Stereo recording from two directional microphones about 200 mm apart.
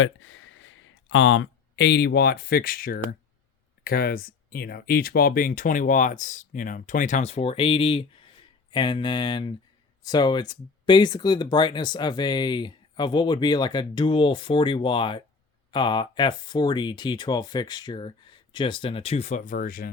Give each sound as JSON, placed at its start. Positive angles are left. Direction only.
{"t": 0.0, "sound": "speech", "side_deg": 85}